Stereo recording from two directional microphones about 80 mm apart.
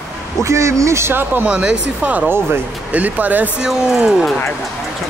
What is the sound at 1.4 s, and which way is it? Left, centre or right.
Speech, centre.